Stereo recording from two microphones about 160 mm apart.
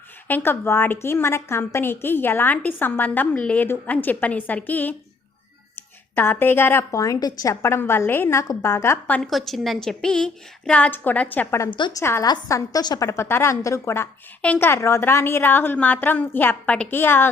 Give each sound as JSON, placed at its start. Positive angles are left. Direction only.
{"t": 0.3, "sound": "a woman's voice", "side_deg": 10}
{"t": 11.7, "sound": "a woman's voice", "side_deg": 30}